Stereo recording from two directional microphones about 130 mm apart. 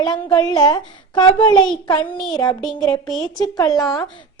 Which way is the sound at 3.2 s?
30° left (ahead or behind).